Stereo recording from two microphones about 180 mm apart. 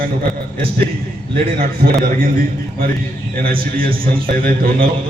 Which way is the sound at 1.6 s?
55° right (ahead or behind).